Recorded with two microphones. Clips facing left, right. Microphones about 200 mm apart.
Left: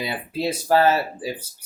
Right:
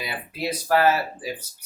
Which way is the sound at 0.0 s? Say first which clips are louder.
Left 4 dB; 25° left (ahead or behind).